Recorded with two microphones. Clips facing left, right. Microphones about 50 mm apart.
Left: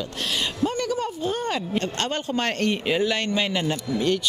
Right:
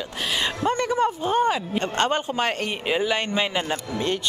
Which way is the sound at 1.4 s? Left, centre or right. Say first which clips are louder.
Right 3 dB; centre.